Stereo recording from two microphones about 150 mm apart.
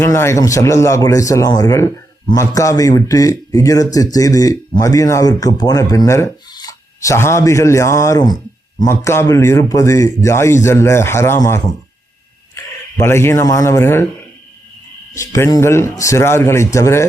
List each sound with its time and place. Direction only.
0.0 s speech: 20° left (ahead or behind)
15.1 s speech: 20° left (ahead or behind)